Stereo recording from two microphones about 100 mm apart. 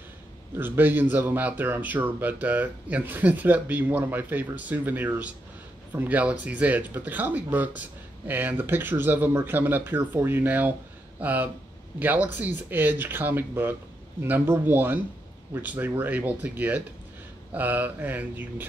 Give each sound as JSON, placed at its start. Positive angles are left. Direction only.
{"t": 0.6, "sound": "speech", "side_deg": -20}